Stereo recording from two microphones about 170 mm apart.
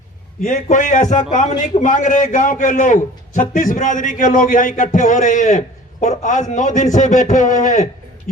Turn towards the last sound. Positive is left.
turn(degrees=45)  # may be behind; listen again after turning